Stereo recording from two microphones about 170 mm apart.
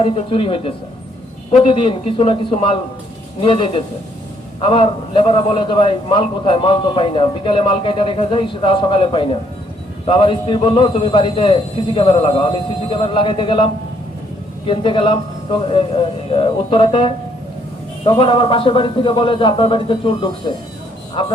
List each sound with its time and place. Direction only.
0.0 s a man's voice: 35° left (ahead or behind)
14.7 s a man's voice: 30° left (ahead or behind)